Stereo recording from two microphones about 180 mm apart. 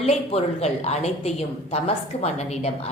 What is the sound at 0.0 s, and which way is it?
A woman's voice, 35° left (ahead or behind).